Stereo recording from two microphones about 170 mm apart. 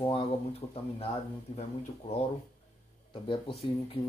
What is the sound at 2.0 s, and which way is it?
Speech, 25° left (ahead or behind).